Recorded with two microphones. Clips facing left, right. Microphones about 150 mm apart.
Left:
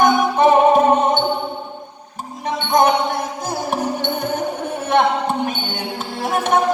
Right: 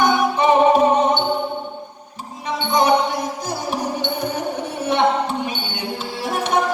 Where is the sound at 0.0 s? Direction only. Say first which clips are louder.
Left 3 dB; 50° left (ahead or behind).